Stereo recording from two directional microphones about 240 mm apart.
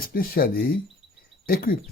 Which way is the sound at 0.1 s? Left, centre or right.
Left.